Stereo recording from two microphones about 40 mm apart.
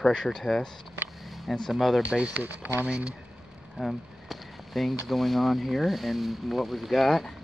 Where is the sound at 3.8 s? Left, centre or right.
Centre.